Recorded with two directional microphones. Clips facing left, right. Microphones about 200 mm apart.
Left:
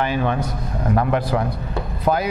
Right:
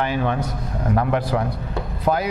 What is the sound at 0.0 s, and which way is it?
A man's voice, 15° left (ahead or behind).